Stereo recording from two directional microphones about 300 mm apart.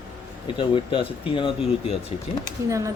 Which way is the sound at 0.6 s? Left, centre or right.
Centre.